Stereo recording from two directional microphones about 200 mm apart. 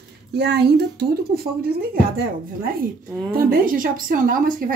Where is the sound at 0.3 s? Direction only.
55° right (ahead or behind).